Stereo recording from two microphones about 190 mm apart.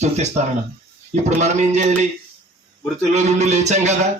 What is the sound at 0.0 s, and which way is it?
Speech, 35° right (ahead or behind).